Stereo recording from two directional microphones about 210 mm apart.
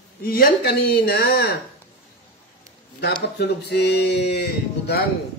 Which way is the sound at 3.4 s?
50° left (ahead or behind).